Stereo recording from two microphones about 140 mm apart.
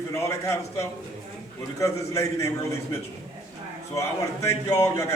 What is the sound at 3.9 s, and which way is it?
A man's voice, 20° left (ahead or behind).